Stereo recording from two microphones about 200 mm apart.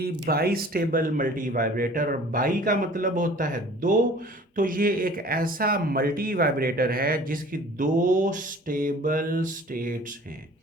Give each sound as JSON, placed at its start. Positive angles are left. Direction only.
{"t": 0.0, "sound": "speech", "side_deg": -50}